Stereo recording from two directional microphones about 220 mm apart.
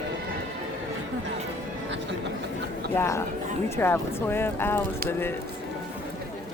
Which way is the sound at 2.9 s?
15° left (ahead or behind).